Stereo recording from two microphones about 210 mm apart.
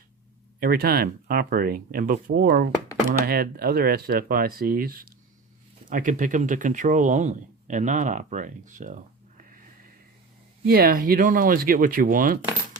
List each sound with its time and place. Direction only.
0.6 s speech: 45° right (ahead or behind)
10.7 s speech: 45° right (ahead or behind)